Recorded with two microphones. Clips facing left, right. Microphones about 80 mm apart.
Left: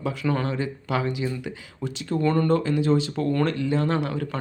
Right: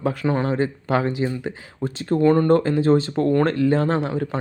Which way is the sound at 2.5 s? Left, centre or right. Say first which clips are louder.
Right 5 dB; right.